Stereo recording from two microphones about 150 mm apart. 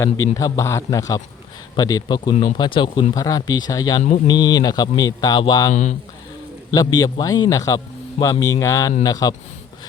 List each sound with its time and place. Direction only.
0.3 s speech: 20° left (ahead or behind)
5.7 s speech: 50° left (ahead or behind)
6.7 s speech: 25° left (ahead or behind)